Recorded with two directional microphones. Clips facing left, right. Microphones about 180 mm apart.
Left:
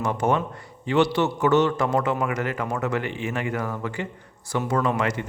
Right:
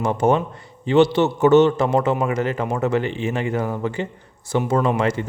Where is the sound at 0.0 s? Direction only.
30° right (ahead or behind).